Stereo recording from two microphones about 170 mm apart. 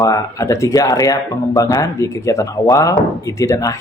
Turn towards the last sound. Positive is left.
turn(degrees=20)  # may be behind; listen again after turning